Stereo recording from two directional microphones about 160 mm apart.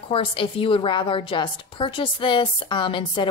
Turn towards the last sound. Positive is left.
turn(degrees=30)  # may be behind; listen again after turning